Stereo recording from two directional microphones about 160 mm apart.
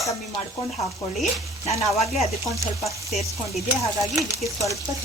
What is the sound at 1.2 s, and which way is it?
Speech, 45° left (ahead or behind).